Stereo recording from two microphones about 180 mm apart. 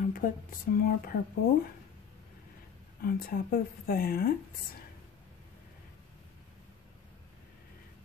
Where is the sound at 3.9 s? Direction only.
55° left (ahead or behind).